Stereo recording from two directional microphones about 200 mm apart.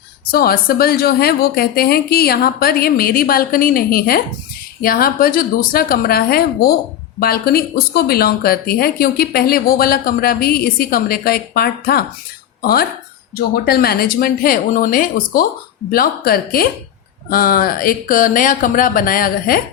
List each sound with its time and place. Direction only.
0.3 s speech: 50° left (ahead or behind)